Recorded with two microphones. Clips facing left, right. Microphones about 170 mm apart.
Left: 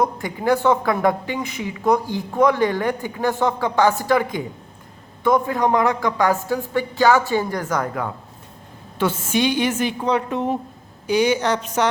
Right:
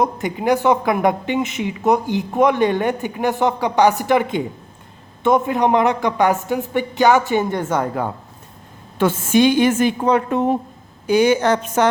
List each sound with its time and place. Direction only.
0.0 s a woman's voice: 20° right (ahead or behind)
9.0 s a woman's voice: 50° right (ahead or behind)